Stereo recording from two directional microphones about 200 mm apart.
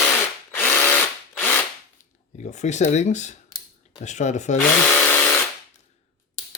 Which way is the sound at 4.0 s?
35° left (ahead or behind).